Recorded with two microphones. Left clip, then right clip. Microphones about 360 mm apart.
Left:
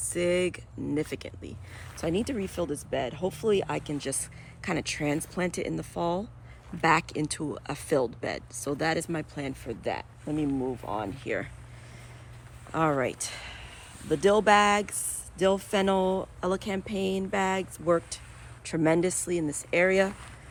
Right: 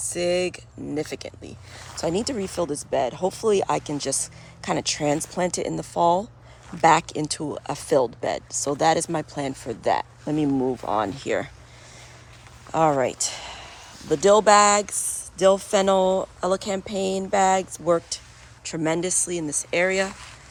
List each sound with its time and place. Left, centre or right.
0.1 s speech: centre
12.7 s speech: centre